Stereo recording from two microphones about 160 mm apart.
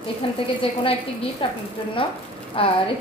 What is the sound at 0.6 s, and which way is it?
A woman's voice, 35° left (ahead or behind).